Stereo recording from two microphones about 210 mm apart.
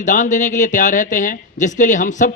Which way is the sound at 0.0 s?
35° left (ahead or behind).